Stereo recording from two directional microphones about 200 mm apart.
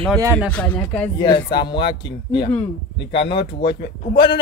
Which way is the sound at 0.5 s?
5° left (ahead or behind).